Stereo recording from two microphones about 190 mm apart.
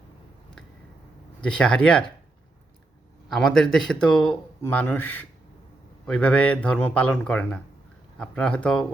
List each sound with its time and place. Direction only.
1.4 s speech: 5° left (ahead or behind)
3.2 s speech: 5° left (ahead or behind)